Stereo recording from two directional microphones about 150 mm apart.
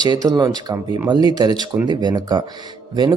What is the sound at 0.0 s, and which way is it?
Speech, 25° right (ahead or behind).